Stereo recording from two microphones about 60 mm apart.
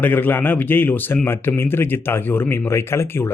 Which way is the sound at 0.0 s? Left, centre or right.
Left.